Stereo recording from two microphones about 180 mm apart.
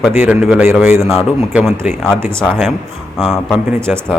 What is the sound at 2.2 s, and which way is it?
Speech, 15° right (ahead or behind).